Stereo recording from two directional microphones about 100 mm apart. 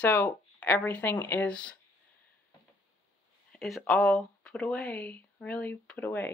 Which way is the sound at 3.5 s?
Centre (ahead or behind).